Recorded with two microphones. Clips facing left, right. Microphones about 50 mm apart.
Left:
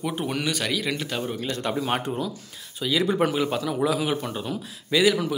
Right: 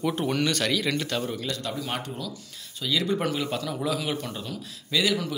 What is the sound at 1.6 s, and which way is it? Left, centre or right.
Speech, left.